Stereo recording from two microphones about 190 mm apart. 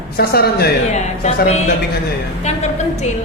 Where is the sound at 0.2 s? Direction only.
55° left (ahead or behind).